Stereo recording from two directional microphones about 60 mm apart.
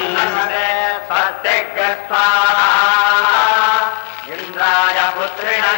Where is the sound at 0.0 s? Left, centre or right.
Left.